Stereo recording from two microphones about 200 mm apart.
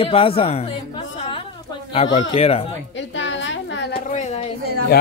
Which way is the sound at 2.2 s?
30° left (ahead or behind).